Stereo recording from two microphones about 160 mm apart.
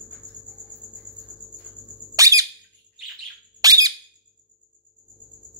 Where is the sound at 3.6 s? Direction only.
25° right (ahead or behind).